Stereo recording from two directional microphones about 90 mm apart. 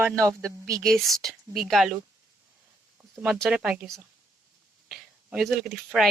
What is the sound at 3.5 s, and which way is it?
Speech, 15° right (ahead or behind).